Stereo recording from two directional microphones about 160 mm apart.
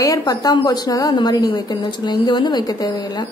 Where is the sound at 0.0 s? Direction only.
25° left (ahead or behind).